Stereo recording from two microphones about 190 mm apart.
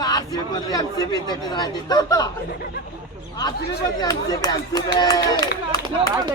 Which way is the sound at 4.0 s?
20° left (ahead or behind).